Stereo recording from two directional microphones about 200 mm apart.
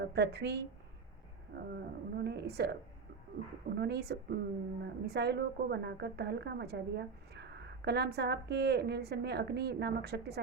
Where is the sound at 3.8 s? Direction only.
55° right (ahead or behind).